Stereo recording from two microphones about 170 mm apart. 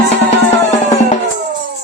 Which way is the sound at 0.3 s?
40° left (ahead or behind).